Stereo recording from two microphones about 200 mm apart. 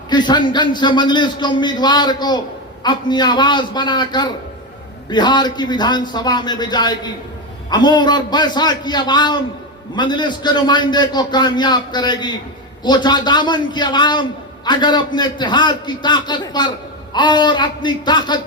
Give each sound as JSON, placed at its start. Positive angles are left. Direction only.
{"t": 0.1, "sound": "a man's voice", "side_deg": 20}